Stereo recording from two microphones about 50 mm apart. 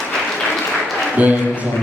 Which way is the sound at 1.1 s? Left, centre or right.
Right.